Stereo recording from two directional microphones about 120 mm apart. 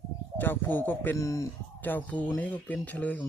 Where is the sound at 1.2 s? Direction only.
25° left (ahead or behind).